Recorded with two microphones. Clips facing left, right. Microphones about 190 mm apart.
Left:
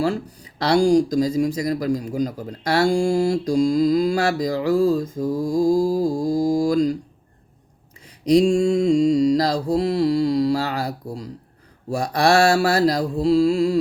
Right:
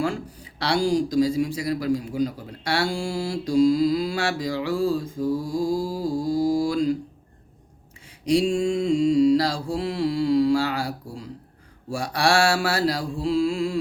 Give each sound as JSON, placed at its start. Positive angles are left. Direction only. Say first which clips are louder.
{"t": 0.0, "sound": "speech", "louder": "left 4 dB", "side_deg": 40}
{"t": 8.2, "sound": "mantra", "louder": "left 5 dB", "side_deg": 40}